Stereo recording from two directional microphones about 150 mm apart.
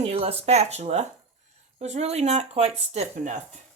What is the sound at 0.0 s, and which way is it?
Speech, 45° right (ahead or behind).